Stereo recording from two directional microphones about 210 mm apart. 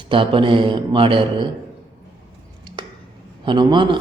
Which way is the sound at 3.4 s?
20° right (ahead or behind).